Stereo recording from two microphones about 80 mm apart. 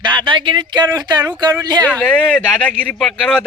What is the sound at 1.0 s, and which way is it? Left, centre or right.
Speech, right.